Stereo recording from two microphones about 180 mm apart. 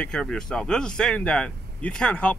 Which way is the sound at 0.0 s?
5° left (ahead or behind).